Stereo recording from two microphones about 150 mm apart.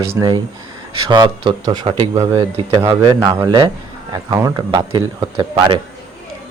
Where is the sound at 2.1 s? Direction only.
20° right (ahead or behind).